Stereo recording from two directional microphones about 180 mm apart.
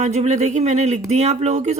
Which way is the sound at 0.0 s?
40° right (ahead or behind).